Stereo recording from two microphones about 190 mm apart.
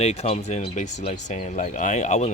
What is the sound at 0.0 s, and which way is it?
Speech, 35° left (ahead or behind).